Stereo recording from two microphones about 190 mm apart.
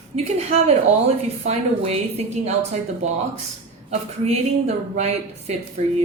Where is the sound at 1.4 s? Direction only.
35° right (ahead or behind).